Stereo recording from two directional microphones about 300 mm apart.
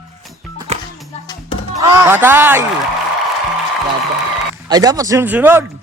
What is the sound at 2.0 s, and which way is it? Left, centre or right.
Speech, centre.